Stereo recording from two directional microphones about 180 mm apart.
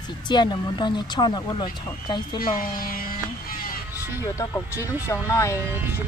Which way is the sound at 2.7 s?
50° left (ahead or behind).